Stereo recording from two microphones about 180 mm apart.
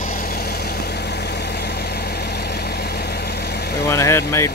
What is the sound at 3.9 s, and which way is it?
Speech, 15° left (ahead or behind).